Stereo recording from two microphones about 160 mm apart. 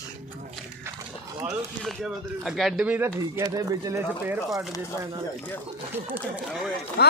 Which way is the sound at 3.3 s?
20° right (ahead or behind).